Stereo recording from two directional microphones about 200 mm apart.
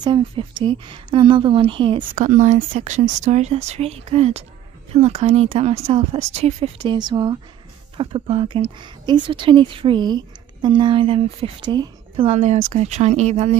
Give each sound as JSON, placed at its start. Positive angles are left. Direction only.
{"t": 0.0, "sound": "a woman's voice", "side_deg": -25}
{"t": 2.1, "sound": "a woman's voice", "side_deg": -40}